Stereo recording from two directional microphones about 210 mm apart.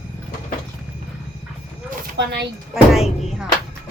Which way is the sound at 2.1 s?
55° right (ahead or behind).